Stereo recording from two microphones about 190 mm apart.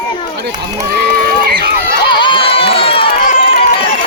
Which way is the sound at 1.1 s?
50° right (ahead or behind).